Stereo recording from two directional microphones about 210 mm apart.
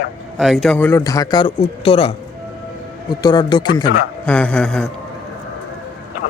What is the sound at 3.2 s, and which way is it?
Speech, 20° left (ahead or behind).